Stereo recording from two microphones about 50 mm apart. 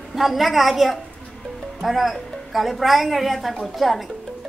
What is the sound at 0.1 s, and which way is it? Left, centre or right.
A woman's voice, centre.